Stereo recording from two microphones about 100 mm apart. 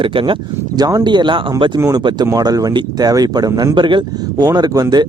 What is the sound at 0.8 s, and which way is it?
Speech, 40° right (ahead or behind).